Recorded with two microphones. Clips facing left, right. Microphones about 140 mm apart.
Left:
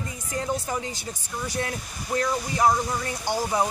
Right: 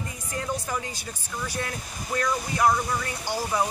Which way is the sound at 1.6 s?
30° left (ahead or behind).